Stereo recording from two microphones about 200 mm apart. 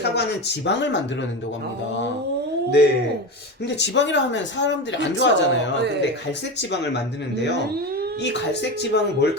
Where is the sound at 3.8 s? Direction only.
60° left (ahead or behind).